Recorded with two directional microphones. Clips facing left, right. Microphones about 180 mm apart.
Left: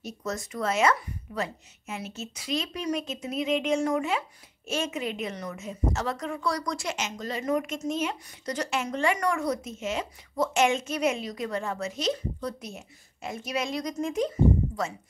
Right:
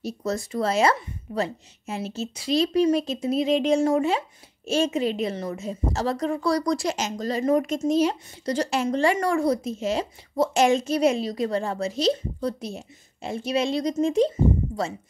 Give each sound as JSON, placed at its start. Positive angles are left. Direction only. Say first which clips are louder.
{"t": 0.0, "sound": "a woman's voice", "louder": "right 6 dB", "side_deg": -30}